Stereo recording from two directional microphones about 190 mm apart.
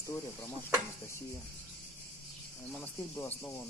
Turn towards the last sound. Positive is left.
turn(degrees=10)  # may be behind; listen again after turning